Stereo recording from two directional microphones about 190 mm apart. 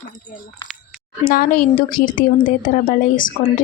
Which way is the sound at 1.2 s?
50° left (ahead or behind).